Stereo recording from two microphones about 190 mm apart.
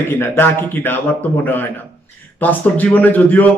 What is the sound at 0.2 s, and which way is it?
A man's voice, 10° left (ahead or behind).